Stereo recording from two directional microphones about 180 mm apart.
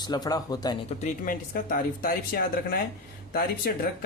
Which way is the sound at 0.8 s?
45° left (ahead or behind).